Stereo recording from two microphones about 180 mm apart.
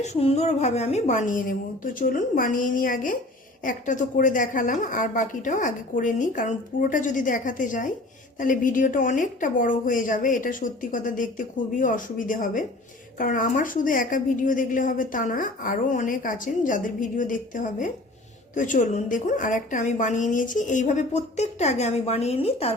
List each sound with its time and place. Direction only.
0.0 s a woman's voice: 35° left (ahead or behind)